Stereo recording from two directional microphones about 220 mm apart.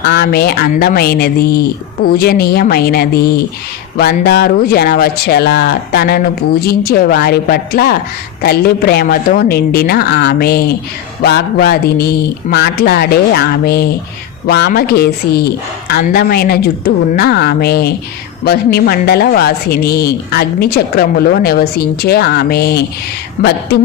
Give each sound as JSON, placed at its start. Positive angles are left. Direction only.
{"t": 0.0, "sound": "speech", "side_deg": 50}